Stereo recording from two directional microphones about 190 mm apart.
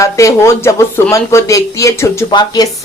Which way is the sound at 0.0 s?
15° left (ahead or behind).